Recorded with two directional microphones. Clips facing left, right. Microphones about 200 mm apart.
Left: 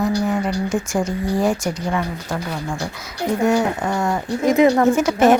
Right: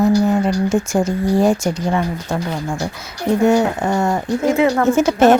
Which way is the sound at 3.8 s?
25° right (ahead or behind).